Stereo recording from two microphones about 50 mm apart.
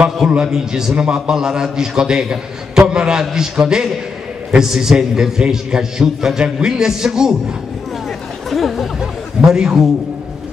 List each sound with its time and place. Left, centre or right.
0.4 s a man's voice: centre
8.5 s chatter: centre
9.0 s a sound: centre